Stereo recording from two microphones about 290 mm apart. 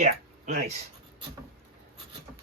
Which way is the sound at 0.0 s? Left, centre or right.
Right.